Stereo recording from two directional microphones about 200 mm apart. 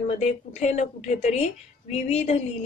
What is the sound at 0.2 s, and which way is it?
A woman's voice, 35° left (ahead or behind).